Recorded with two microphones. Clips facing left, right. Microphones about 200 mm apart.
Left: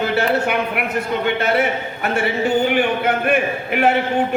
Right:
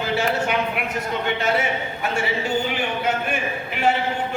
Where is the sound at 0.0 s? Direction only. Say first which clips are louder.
Left 4 dB; 60° left (ahead or behind).